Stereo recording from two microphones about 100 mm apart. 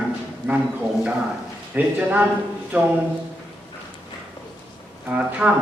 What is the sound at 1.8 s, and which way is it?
Speech, 15° right (ahead or behind).